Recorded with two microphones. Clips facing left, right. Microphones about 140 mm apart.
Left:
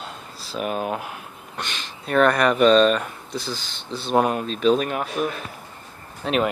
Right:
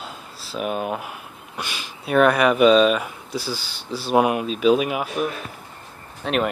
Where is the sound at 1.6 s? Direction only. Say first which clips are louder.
Right 1 dB; 10° right (ahead or behind).